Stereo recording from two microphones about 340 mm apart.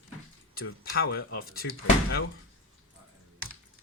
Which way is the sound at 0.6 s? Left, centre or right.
Left.